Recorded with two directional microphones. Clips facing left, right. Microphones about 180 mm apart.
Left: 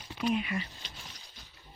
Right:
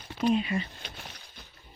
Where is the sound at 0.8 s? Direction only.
60° right (ahead or behind).